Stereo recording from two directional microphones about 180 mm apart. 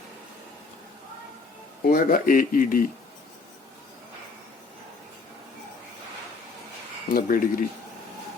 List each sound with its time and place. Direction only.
1.8 s speech: 50° left (ahead or behind)
7.1 s speech: 50° left (ahead or behind)